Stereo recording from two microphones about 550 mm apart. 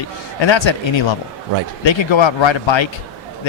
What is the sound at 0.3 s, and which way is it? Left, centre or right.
Speech, left.